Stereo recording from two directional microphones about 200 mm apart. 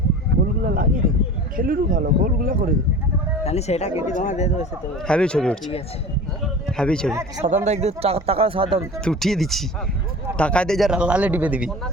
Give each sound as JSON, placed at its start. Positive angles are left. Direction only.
{"t": 0.6, "sound": "a sound", "side_deg": -45}
{"t": 1.5, "sound": "speech", "side_deg": -45}
{"t": 3.4, "sound": "speech", "side_deg": 30}
{"t": 5.0, "sound": "a man's voice", "side_deg": 5}
{"t": 6.4, "sound": "a sound", "side_deg": 0}
{"t": 7.1, "sound": "speech", "side_deg": -15}
{"t": 7.4, "sound": "speech", "side_deg": -35}
{"t": 9.0, "sound": "a man's voice", "side_deg": 0}